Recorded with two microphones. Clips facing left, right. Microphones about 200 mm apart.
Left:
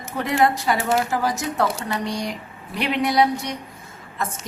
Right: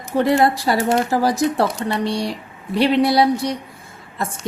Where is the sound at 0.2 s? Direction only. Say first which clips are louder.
Right 4 dB; 35° right (ahead or behind).